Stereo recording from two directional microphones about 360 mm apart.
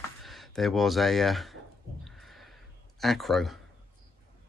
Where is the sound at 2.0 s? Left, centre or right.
Centre.